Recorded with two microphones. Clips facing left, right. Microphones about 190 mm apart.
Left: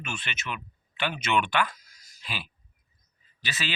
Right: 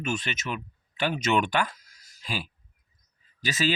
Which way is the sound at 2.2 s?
40° right (ahead or behind).